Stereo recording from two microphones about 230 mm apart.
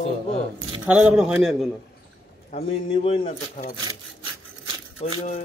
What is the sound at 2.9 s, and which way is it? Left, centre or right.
Speech, left.